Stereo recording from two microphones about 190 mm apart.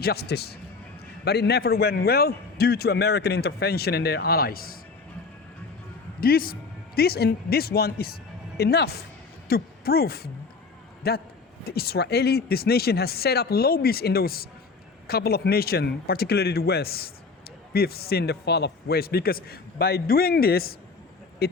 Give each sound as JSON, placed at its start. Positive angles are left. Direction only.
{"t": 0.0, "sound": "a man's voice", "side_deg": 55}
{"t": 6.1, "sound": "a man's voice", "side_deg": 50}